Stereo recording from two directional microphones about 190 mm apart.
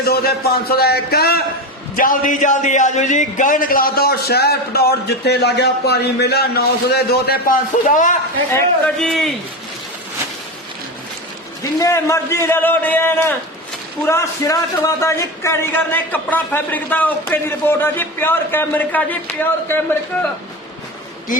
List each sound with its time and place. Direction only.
0.0 s speech: 55° left (ahead or behind)
9.0 s a man's voice: centre (ahead or behind)
11.8 s speech: 15° left (ahead or behind)